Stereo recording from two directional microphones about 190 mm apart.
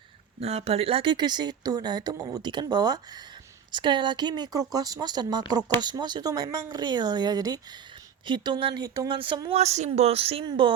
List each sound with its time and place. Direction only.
0.3 s speech: 30° right (ahead or behind)